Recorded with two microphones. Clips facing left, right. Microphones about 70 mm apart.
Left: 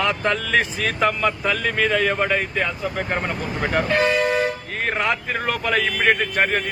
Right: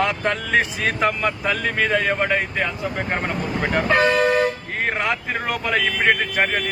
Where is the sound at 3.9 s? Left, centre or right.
Right.